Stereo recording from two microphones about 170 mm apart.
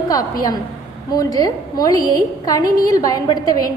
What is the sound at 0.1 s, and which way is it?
A woman's voice, 20° left (ahead or behind).